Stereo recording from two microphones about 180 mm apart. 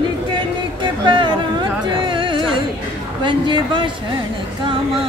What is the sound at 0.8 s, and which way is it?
Speech, 25° right (ahead or behind).